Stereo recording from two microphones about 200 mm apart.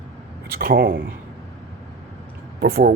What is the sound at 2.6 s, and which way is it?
Speech, 55° right (ahead or behind).